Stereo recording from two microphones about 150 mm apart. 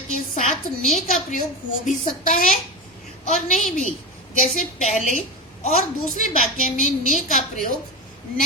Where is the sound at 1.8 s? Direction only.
55° left (ahead or behind).